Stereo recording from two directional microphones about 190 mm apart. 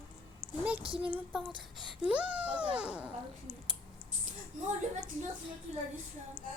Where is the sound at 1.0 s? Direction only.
5° right (ahead or behind).